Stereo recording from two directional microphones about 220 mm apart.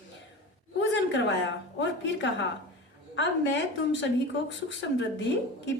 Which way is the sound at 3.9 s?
55° left (ahead or behind).